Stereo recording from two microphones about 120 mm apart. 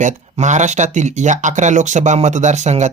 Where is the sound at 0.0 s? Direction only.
80° right.